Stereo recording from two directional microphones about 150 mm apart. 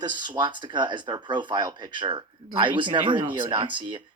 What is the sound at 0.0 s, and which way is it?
Speech, 30° right (ahead or behind).